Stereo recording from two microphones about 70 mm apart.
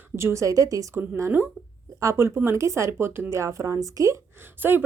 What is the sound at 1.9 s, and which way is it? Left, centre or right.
A woman's voice, right.